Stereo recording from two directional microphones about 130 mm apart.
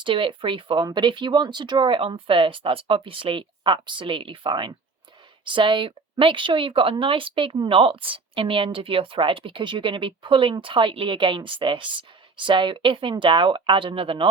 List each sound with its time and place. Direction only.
0.0 s speech: 40° right (ahead or behind)